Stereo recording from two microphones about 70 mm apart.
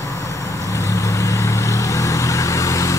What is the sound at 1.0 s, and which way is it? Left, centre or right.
Vehicle, left.